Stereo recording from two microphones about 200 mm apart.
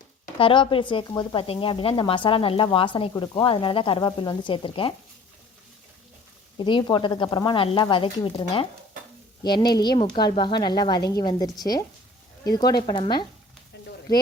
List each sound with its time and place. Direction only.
0.3 s speech: 25° left (ahead or behind)
6.6 s speech: 25° left (ahead or behind)